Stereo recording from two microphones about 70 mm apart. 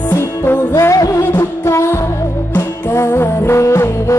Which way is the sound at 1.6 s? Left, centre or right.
Left.